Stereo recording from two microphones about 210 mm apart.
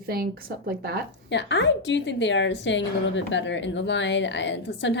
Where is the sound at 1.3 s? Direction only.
60° left (ahead or behind).